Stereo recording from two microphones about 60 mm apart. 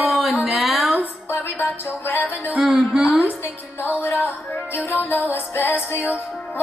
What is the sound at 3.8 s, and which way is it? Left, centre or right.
Music, left.